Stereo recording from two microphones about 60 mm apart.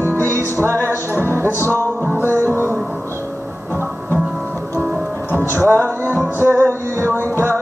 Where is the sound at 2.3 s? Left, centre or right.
Right.